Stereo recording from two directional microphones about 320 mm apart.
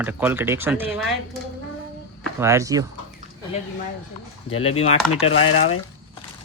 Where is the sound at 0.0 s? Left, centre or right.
Centre.